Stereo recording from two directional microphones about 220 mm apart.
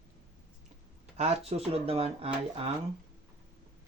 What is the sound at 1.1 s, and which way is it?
Speech, 30° right (ahead or behind).